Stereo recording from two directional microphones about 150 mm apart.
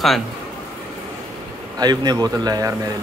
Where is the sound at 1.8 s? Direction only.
25° right (ahead or behind).